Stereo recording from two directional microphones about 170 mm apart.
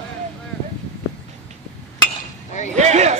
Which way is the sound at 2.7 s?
40° right (ahead or behind).